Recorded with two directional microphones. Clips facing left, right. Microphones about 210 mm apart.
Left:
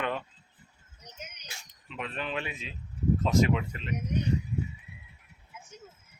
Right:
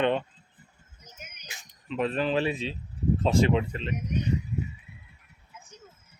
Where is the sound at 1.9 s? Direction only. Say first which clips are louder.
Right 9 dB; 35° right (ahead or behind).